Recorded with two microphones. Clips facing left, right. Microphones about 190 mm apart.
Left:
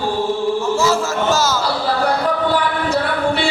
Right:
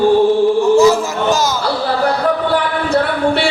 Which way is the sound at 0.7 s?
15° right (ahead or behind).